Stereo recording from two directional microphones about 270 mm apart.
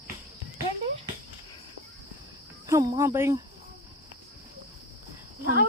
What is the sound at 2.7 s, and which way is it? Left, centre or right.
Speech, centre.